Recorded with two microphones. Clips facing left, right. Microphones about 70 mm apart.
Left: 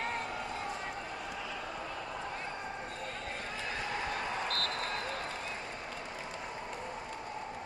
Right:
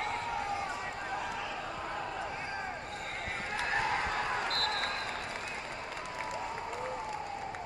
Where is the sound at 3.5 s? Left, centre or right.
Right.